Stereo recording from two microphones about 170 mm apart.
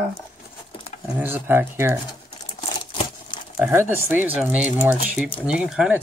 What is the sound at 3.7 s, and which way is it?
Speech, 15° right (ahead or behind).